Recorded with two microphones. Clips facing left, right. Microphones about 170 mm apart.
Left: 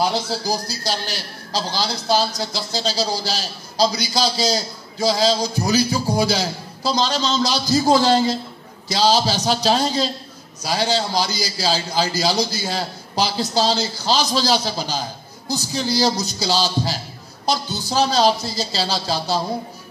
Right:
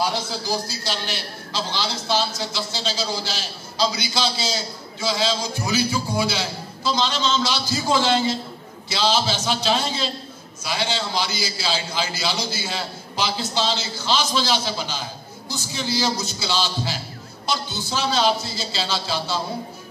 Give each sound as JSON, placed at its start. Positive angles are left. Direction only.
{"t": 0.5, "sound": "a woman's voice", "side_deg": 40}